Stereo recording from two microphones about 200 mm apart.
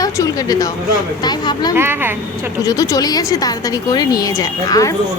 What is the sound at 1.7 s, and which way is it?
Speech, 10° right (ahead or behind).